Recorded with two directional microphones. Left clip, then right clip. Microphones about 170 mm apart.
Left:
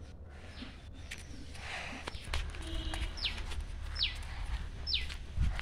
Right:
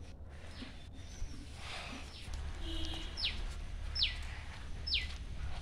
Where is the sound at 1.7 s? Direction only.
10° left (ahead or behind).